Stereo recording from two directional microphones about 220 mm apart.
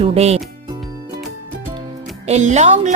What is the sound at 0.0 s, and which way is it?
Speech, 25° right (ahead or behind).